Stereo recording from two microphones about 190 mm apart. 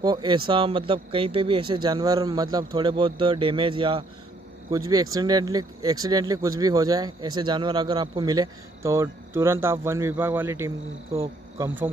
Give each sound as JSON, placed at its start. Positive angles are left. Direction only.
{"t": 0.0, "sound": "speech", "side_deg": -20}